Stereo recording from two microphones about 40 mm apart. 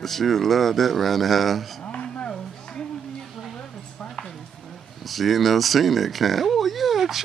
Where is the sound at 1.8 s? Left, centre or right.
Left.